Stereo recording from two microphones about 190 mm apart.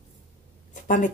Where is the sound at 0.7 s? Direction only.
45° left (ahead or behind).